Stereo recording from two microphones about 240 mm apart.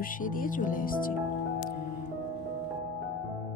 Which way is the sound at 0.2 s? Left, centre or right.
Left.